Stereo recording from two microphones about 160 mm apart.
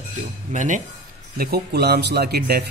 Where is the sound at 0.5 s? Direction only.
50° right (ahead or behind).